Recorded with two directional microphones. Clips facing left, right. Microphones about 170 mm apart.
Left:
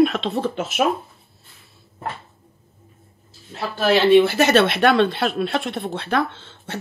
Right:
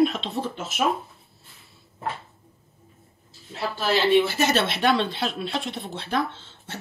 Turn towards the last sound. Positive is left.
turn(degrees=65)  # may be behind; listen again after turning